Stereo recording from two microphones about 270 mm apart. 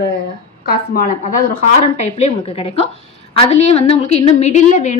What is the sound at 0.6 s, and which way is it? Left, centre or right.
A woman's voice, left.